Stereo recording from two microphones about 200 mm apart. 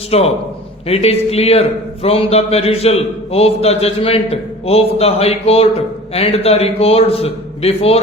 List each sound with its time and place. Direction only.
0.1 s a man's voice: 30° left (ahead or behind)